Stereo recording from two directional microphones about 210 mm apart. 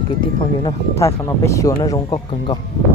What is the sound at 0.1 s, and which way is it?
Speech, 25° left (ahead or behind).